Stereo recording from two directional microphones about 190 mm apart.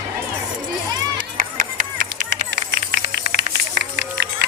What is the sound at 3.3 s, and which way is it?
Run, 60° right (ahead or behind).